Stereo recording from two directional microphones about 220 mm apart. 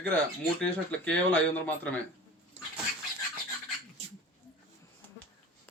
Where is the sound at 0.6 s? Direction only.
5° left (ahead or behind).